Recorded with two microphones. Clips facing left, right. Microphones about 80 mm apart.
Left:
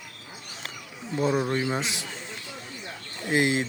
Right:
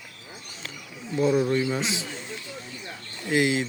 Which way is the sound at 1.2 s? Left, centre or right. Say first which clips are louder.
Right 3 dB; left.